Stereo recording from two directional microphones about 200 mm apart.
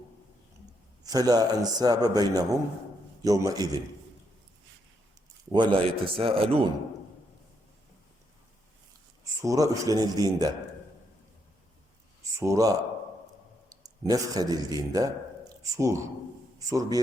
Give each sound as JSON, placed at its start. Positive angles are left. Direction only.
{"t": 1.0, "sound": "a man's voice", "side_deg": -20}
{"t": 5.5, "sound": "a man's voice", "side_deg": -25}
{"t": 9.4, "sound": "speech", "side_deg": -15}
{"t": 12.4, "sound": "a man's voice", "side_deg": -15}